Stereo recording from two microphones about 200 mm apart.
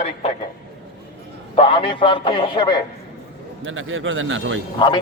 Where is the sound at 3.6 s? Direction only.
75° right (ahead or behind).